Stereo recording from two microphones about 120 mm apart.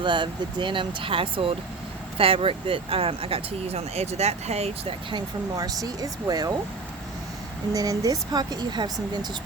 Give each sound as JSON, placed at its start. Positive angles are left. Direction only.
{"t": 0.0, "sound": "speech", "side_deg": -40}
{"t": 5.1, "sound": "speech", "side_deg": -30}
{"t": 7.7, "sound": "speech", "side_deg": -30}